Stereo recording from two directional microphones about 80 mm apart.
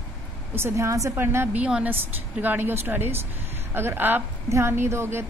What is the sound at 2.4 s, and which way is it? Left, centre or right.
A woman's voice, right.